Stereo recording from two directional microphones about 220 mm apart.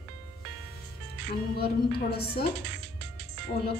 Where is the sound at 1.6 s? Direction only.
45° left (ahead or behind).